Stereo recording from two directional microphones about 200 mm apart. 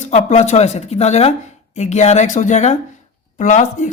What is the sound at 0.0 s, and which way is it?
A woman's voice, 35° left (ahead or behind).